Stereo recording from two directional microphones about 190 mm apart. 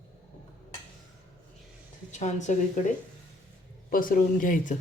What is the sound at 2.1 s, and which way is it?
A woman's voice, 40° left (ahead or behind).